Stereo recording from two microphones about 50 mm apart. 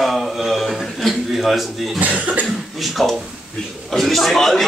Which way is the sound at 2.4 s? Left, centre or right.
Centre.